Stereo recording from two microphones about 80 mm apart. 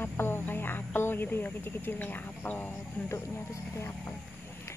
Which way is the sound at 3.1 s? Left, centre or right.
Left.